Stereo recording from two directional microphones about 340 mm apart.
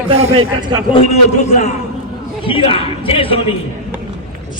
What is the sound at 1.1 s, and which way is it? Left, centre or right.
A man's voice, centre.